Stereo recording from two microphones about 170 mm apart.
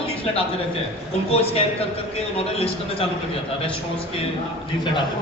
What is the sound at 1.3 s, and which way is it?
Speech, 35° left (ahead or behind).